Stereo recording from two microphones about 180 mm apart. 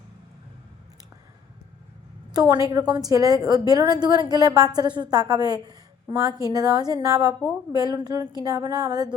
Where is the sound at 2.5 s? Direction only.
20° right (ahead or behind).